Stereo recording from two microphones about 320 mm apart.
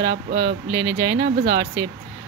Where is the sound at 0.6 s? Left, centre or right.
Centre.